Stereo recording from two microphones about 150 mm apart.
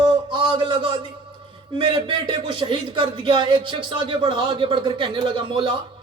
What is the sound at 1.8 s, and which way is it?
A man's voice, 35° right (ahead or behind).